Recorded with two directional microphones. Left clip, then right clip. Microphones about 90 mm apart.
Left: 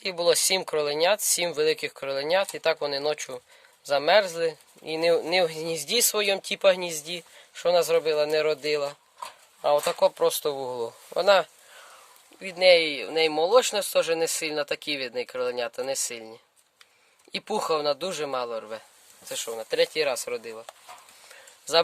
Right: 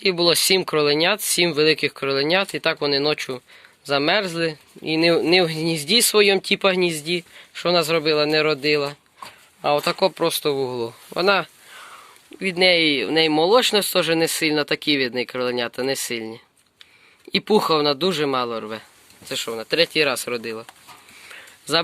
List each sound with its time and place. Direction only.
0.0 s speech: 30° left (ahead or behind); by 10.6 s 50° left (ahead or behind)
11.2 s speech: 40° left (ahead or behind)
12.4 s speech: 10° left (ahead or behind)
21.2 s a sound: 20° left (ahead or behind)